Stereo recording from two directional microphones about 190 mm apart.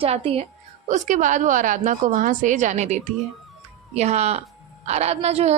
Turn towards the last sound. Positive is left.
turn(degrees=-35)  # may be behind; listen again after turning